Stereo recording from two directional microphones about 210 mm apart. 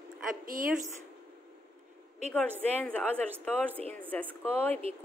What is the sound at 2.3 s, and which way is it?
A woman's voice, 5° left (ahead or behind).